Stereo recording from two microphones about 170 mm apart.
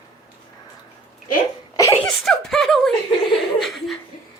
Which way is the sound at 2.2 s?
Centre (ahead or behind).